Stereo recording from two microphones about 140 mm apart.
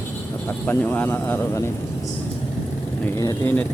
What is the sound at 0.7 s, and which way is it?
A man's voice, 15° left (ahead or behind).